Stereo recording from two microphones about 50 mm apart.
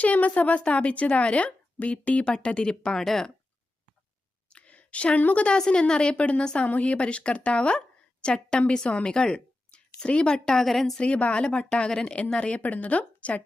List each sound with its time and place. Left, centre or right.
0.0 s a woman's voice: left
3.0 s speech: centre
4.4 s a sound: left
5.2 s a woman's voice: left
5.5 s a woman's voice: centre
10.9 s a woman's voice: left